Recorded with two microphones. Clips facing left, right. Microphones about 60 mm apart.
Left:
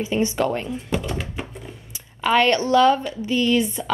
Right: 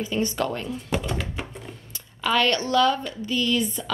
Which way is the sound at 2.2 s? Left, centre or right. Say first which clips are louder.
Left 4 dB; left.